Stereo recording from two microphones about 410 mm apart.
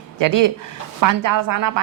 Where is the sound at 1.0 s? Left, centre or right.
Right.